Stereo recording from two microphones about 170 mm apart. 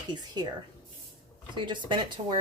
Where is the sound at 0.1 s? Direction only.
25° right (ahead or behind).